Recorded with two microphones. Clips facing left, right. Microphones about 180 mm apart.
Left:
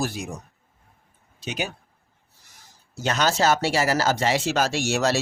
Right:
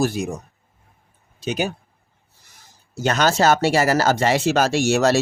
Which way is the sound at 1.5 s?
40° right (ahead or behind).